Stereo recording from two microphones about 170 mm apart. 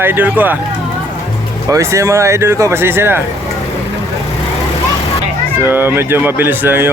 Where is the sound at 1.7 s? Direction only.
15° right (ahead or behind).